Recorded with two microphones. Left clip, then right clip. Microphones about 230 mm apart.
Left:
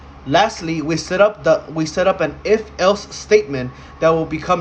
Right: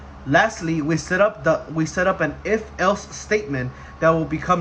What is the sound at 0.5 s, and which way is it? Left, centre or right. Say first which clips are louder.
Speech: left 2 dB; left.